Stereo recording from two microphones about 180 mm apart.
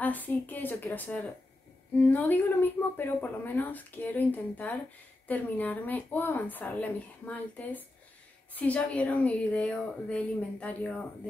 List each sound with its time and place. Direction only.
0.0 s speech: 10° left (ahead or behind)